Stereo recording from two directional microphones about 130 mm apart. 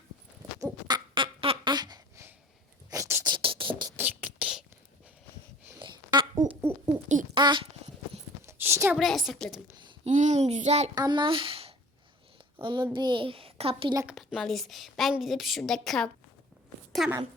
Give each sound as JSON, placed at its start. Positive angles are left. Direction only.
{"t": 0.6, "sound": "a sound", "side_deg": -30}
{"t": 2.9, "sound": "beatboxing", "side_deg": -25}
{"t": 3.3, "sound": "a sound", "side_deg": -40}
{"t": 3.9, "sound": "beatboxing", "side_deg": -15}
{"t": 4.4, "sound": "whispering", "side_deg": -5}
{"t": 5.8, "sound": "a sound", "side_deg": -35}
{"t": 7.3, "sound": "a child's voice", "side_deg": -40}
{"t": 8.4, "sound": "a sound", "side_deg": -20}
{"t": 9.0, "sound": "a woman's voice", "side_deg": 0}
{"t": 10.0, "sound": "speech", "side_deg": -65}
{"t": 10.9, "sound": "a child's voice", "side_deg": -35}
{"t": 14.1, "sound": "a woman's voice", "side_deg": -5}